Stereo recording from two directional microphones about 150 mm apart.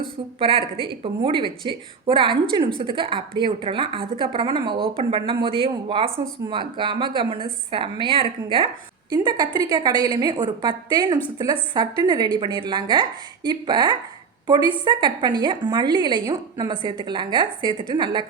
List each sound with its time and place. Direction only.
0.3 s a woman's voice: 35° right (ahead or behind)